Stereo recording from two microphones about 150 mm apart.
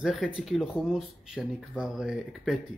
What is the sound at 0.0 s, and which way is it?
Speech, 5° right (ahead or behind).